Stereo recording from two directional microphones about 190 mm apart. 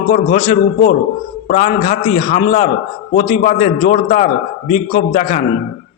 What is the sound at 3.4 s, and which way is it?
Speech, 40° left (ahead or behind).